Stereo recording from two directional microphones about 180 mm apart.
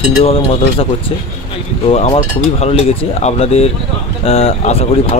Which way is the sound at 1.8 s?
35° left (ahead or behind).